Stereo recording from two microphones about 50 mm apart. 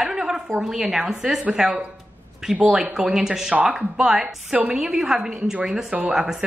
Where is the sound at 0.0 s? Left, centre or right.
Centre.